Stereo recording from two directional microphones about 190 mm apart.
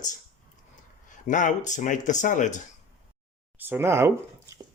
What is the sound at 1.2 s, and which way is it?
Speech, 40° left (ahead or behind).